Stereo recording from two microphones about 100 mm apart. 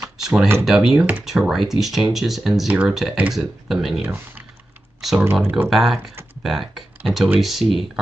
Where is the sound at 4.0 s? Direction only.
20° right (ahead or behind).